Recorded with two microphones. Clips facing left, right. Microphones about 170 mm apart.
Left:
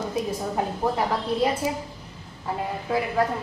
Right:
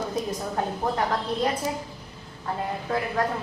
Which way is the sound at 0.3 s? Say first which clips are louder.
Left 1 dB; 10° left (ahead or behind).